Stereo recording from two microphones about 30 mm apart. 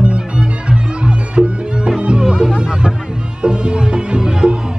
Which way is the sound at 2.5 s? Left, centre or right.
Centre.